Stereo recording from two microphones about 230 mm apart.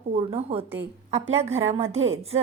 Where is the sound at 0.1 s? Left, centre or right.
Right.